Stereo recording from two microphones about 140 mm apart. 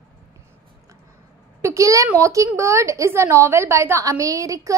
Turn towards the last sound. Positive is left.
turn(degrees=-25)  # may be behind; listen again after turning